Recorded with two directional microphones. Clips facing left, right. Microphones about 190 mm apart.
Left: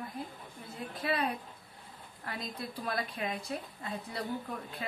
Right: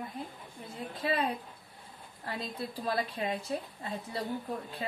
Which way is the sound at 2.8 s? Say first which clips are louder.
Right 3 dB; 30° right (ahead or behind).